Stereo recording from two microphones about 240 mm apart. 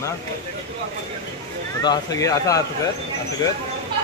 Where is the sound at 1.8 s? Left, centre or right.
Centre.